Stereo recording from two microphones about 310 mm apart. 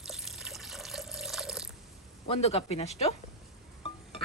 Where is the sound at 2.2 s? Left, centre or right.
Centre.